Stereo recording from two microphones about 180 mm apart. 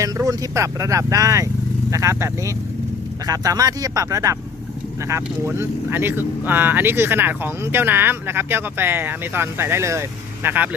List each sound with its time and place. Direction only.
0.0 s speech: 15° right (ahead or behind)